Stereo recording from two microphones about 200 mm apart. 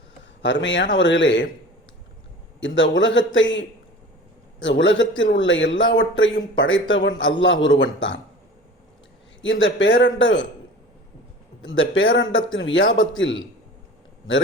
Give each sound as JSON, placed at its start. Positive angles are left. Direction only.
{"t": 0.4, "sound": "speech", "side_deg": 65}
{"t": 2.6, "sound": "a man's voice", "side_deg": 65}
{"t": 4.6, "sound": "a man's voice", "side_deg": 65}
{"t": 9.4, "sound": "a man's voice", "side_deg": 70}
{"t": 11.6, "sound": "a man's voice", "side_deg": 75}